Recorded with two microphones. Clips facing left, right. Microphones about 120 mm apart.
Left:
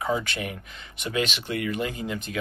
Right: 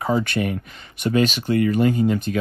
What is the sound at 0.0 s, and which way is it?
Speech, 45° right (ahead or behind).